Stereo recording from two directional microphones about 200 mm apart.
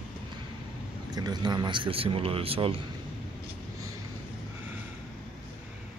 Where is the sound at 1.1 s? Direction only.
20° right (ahead or behind).